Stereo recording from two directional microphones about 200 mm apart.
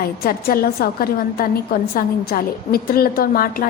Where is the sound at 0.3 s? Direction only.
45° left (ahead or behind).